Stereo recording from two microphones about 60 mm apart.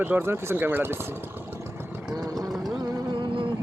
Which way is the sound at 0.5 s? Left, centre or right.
Right.